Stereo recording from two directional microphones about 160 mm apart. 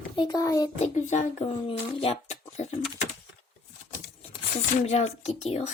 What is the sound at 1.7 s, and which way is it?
Speech, 40° left (ahead or behind).